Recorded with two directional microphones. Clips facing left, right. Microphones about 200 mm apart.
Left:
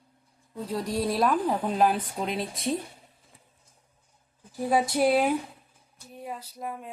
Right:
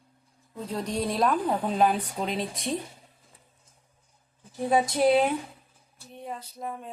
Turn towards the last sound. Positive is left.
turn(degrees=5)  # may be behind; listen again after turning